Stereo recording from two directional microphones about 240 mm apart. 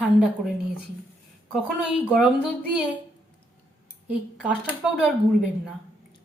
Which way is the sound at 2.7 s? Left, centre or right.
Centre.